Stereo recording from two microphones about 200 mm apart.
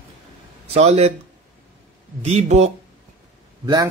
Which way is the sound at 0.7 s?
30° right (ahead or behind).